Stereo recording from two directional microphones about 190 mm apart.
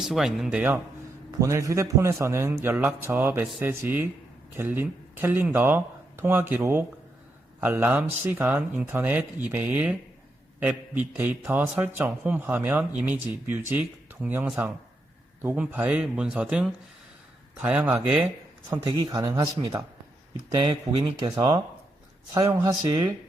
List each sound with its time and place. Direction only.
0.0 s speech: centre (ahead or behind); by 21.6 s 20° right (ahead or behind)
22.6 s speech: 20° right (ahead or behind)